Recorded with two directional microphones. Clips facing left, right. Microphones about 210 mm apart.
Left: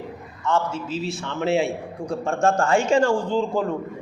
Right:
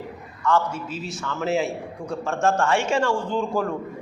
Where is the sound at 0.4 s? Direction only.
25° left (ahead or behind).